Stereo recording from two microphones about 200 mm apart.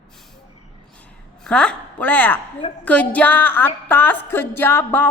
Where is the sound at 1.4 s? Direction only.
5° left (ahead or behind).